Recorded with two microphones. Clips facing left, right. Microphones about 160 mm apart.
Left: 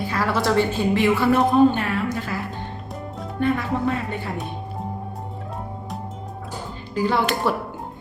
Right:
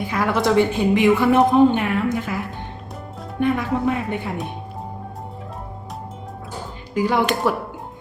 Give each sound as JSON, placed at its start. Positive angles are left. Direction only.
{"t": 0.0, "sound": "a woman's voice", "side_deg": -15}
{"t": 3.4, "sound": "a woman's voice", "side_deg": -15}
{"t": 6.9, "sound": "a woman's voice", "side_deg": -15}